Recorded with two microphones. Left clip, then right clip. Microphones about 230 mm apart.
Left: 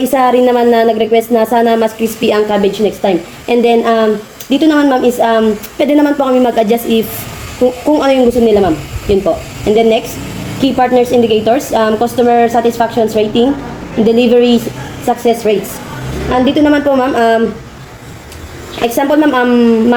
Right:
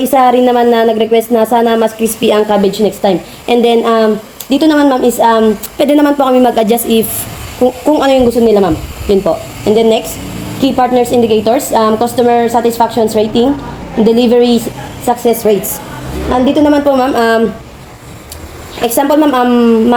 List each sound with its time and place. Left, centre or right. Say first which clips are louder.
0.0 s a woman's voice: right 1 dB; right
18.9 s a woman's voice: right 1 dB; right